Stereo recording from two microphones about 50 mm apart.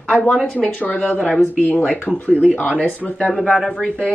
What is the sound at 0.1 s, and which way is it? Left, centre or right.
Speech, centre.